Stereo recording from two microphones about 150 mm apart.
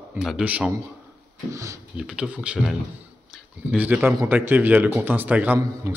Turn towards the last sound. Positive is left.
turn(degrees=-15)  # may be behind; listen again after turning